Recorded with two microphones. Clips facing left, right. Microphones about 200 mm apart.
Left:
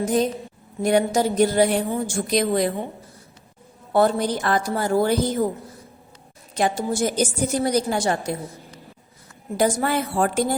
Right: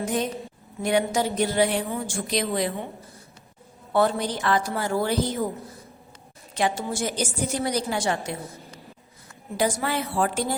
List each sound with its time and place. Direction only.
0.0 s a woman's voice: 35° left (ahead or behind)
3.9 s a woman's voice: 45° left (ahead or behind)
6.5 s a woman's voice: 45° left (ahead or behind)
9.6 s a woman's voice: 45° left (ahead or behind)